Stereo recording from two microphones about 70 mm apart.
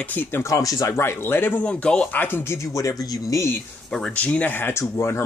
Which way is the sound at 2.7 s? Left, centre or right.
Left.